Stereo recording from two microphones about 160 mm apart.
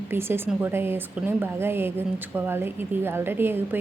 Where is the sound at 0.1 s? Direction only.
15° right (ahead or behind).